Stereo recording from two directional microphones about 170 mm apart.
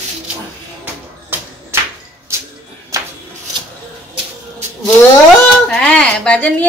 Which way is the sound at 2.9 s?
20° right (ahead or behind).